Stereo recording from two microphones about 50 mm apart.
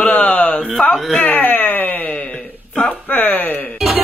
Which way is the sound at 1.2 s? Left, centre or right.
Left.